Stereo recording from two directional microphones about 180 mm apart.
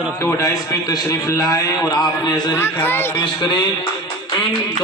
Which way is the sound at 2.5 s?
10° left (ahead or behind).